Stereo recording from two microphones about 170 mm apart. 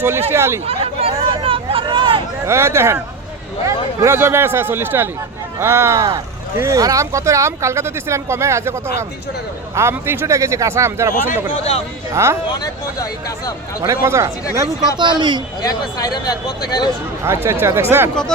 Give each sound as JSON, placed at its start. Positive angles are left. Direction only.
{"t": 0.0, "sound": "speech", "side_deg": -15}
{"t": 0.7, "sound": "vehicle", "side_deg": -35}
{"t": 2.5, "sound": "speech", "side_deg": -15}
{"t": 4.0, "sound": "speech", "side_deg": -15}
{"t": 12.1, "sound": "speech", "side_deg": -15}
{"t": 12.5, "sound": "speech", "side_deg": 20}
{"t": 13.8, "sound": "speech", "side_deg": -15}
{"t": 15.6, "sound": "speech", "side_deg": 20}
{"t": 17.2, "sound": "speech", "side_deg": -15}
{"t": 18.1, "sound": "speech", "side_deg": 5}